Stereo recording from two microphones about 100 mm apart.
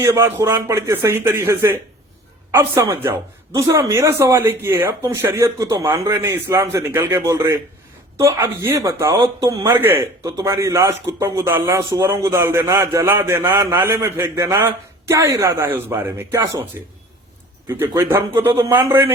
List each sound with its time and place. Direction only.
0.0 s speech: 25° right (ahead or behind)
9.6 s speech: 20° right (ahead or behind)